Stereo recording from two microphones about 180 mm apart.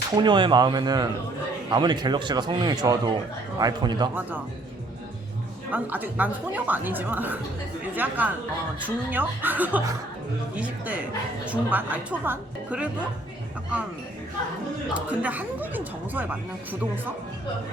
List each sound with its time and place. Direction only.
0.2 s speech: 25° right (ahead or behind)
5.7 s a woman's voice: 10° right (ahead or behind)
14.9 s a woman's voice: 10° right (ahead or behind)